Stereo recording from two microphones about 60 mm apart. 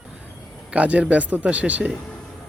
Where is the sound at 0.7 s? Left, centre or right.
Right.